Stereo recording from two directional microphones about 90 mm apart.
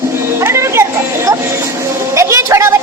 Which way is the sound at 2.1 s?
35° right (ahead or behind).